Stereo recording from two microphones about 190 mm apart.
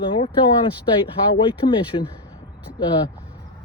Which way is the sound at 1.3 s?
25° left (ahead or behind).